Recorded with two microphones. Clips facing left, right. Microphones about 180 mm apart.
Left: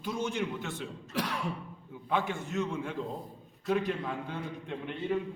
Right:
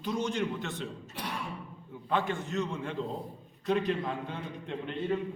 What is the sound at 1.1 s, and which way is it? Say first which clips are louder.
Throat clearing: left 7 dB; 90° left.